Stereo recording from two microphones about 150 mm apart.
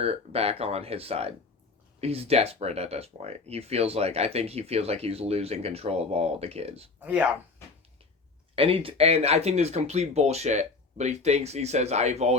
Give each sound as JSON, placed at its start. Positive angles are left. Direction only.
{"t": 0.0, "sound": "speech", "side_deg": -40}
{"t": 7.0, "sound": "speech", "side_deg": -10}
{"t": 8.5, "sound": "speech", "side_deg": -40}